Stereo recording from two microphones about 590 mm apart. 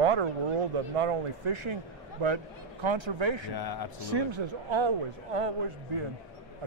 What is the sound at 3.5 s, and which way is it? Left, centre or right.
Speech, left.